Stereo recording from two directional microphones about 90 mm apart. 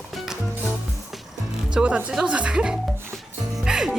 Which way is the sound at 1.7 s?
10° right (ahead or behind).